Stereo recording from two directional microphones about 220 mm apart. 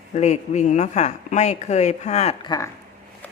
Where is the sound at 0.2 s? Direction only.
30° left (ahead or behind).